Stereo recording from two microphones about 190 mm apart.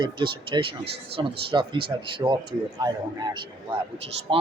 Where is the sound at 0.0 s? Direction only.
25° right (ahead or behind).